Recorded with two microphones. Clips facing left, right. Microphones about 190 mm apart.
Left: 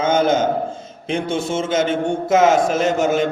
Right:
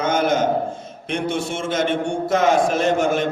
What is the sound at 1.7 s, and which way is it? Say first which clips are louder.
A man's voice: left 1 dB; 25° left (ahead or behind).